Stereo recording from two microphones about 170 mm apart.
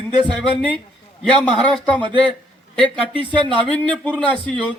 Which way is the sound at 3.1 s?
30° right (ahead or behind).